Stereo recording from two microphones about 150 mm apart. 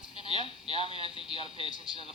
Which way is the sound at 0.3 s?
35° left (ahead or behind).